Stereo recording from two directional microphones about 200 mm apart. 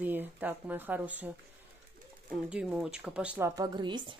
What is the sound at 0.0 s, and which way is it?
Speech, 10° right (ahead or behind).